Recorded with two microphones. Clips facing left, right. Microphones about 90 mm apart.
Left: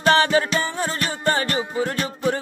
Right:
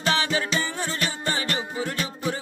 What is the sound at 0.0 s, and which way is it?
Music, 55° left (ahead or behind).